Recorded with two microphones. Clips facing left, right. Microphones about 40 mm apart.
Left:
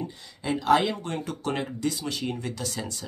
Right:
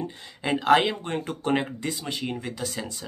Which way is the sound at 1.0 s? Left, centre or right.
Right.